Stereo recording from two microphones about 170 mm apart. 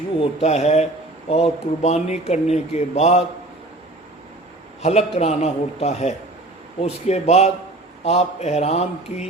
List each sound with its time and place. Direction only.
0.2 s speech: 40° left (ahead or behind)
4.8 s speech: 40° left (ahead or behind)